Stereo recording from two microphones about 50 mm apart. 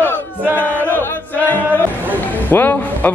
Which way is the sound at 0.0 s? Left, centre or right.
Left.